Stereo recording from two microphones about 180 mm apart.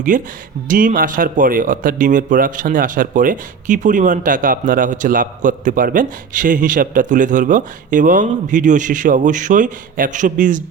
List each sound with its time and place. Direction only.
0.1 s speech: 45° right (ahead or behind)